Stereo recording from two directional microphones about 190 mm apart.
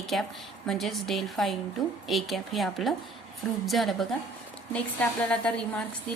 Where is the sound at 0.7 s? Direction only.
Centre (ahead or behind).